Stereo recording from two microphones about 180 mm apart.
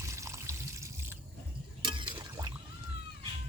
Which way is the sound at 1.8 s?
25° right (ahead or behind).